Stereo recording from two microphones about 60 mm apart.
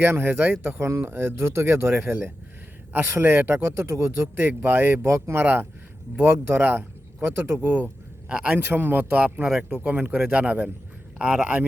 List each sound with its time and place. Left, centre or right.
0.0 s speech: right
4.4 s speech: right
5.0 s speech: right
5.4 s speech: right
8.3 s speech: centre
8.5 s speech: right
9.5 s speech: centre